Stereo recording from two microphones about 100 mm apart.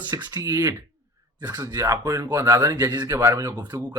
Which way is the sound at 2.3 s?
25° right (ahead or behind).